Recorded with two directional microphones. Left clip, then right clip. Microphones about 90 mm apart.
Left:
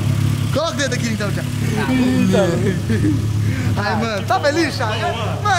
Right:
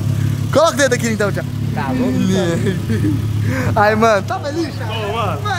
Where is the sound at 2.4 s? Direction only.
20° right (ahead or behind).